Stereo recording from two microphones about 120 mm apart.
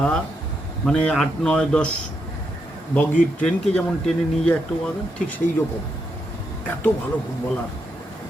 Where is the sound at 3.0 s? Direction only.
10° left (ahead or behind).